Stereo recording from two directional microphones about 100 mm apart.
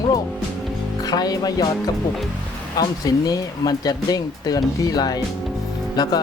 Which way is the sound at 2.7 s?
40° left (ahead or behind).